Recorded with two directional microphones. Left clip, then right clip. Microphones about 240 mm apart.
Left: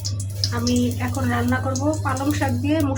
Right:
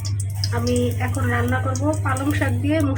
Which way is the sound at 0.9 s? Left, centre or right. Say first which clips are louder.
Even; centre.